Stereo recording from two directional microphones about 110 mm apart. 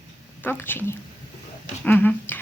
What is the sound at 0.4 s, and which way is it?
Speech, 20° left (ahead or behind).